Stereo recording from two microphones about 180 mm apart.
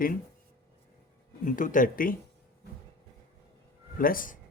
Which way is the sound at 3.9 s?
50° left (ahead or behind).